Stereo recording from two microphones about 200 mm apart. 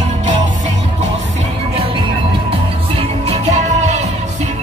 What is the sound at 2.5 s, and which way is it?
Music, 30° right (ahead or behind).